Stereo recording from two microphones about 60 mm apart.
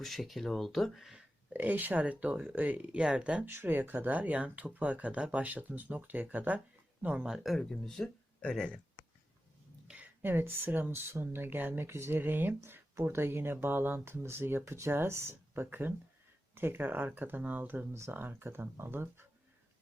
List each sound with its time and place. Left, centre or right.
0.0 s speech: centre
1.5 s speech: right
3.4 s speech: right
7.3 s speech: centre
7.6 s speech: centre
9.8 s a sound: centre
10.2 s speech: right
12.5 s speech: right